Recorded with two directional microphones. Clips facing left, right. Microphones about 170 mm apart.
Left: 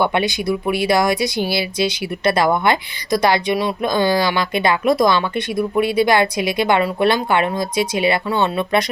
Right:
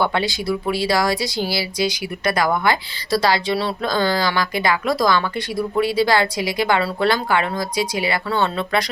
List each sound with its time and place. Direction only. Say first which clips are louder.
0.0 s speech: left 3 dB; 20° left (ahead or behind)